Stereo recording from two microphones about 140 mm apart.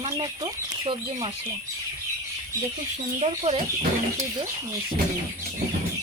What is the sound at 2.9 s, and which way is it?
Speech, 50° right (ahead or behind).